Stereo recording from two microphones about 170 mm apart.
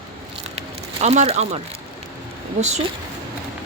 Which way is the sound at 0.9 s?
40° right (ahead or behind).